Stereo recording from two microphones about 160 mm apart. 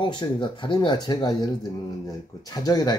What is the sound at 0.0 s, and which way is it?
Speech, 30° left (ahead or behind).